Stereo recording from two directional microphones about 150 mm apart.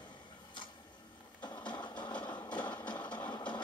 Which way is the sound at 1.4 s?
30° left (ahead or behind).